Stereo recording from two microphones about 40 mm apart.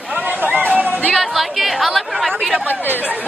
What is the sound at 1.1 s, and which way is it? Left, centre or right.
Speech, centre.